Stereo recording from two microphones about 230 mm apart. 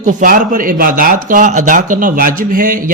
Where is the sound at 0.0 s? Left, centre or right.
Right.